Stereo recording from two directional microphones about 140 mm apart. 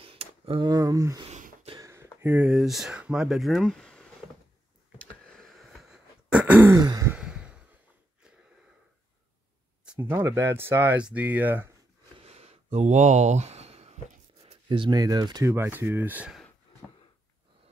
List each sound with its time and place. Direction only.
0.0 s a sound: 40° right (ahead or behind)
0.7 s speech: 25° right (ahead or behind); by 4.1 s 5° left (ahead or behind)
5.1 s throat clearing: 5° left (ahead or behind); by 6.7 s 10° right (ahead or behind)
6.7 s speech: 25° right (ahead or behind)
7.1 s sigh: 5° right (ahead or behind)
9.9 s speech: 15° right (ahead or behind)
12.2 s gasp: 50° right (ahead or behind)
12.7 s a sound: 55° right (ahead or behind); by 15.5 s 30° right (ahead or behind)
15.5 s speech: 15° right (ahead or behind)